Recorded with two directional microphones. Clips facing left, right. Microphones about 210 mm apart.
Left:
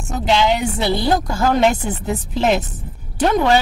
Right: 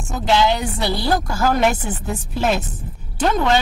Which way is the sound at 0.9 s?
20° left (ahead or behind).